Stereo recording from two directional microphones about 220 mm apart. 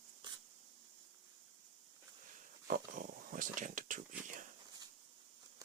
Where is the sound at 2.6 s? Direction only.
40° right (ahead or behind).